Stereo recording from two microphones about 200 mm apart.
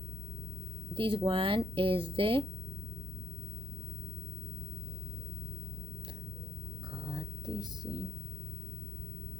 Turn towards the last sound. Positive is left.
turn(degrees=-20)  # may be behind; listen again after turning